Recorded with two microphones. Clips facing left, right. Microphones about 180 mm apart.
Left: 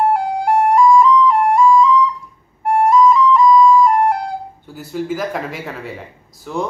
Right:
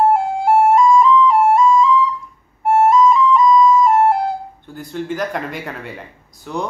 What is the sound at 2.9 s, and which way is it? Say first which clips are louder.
Flute: left 1 dB; 25° right (ahead or behind).